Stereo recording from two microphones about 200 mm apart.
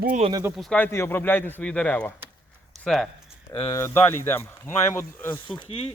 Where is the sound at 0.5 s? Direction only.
5° left (ahead or behind).